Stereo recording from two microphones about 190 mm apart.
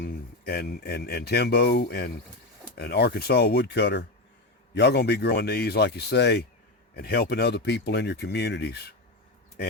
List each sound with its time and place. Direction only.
0.0 s speech: 55° left (ahead or behind)